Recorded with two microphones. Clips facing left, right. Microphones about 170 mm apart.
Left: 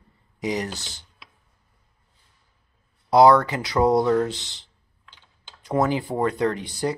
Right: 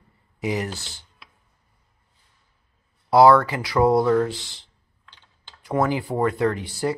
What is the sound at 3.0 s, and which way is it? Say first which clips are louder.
Speech: right 1 dB; 20° left (ahead or behind).